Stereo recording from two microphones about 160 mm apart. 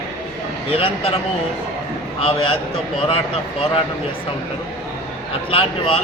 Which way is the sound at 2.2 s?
35° left (ahead or behind).